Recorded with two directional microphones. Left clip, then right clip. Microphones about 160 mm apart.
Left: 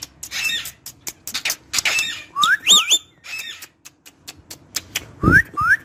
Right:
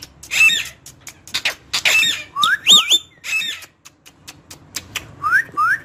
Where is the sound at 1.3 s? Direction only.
10° right (ahead or behind).